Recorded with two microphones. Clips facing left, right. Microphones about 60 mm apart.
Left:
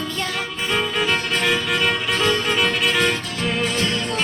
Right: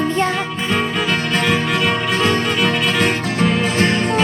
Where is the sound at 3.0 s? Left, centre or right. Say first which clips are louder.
Right 5 dB; right.